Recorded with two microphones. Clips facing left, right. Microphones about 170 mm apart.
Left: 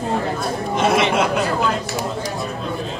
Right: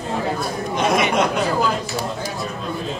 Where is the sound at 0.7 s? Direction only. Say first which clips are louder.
Left 1 dB; 5° left (ahead or behind).